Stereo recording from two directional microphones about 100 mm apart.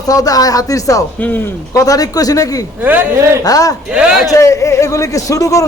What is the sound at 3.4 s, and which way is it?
Speech, 35° left (ahead or behind).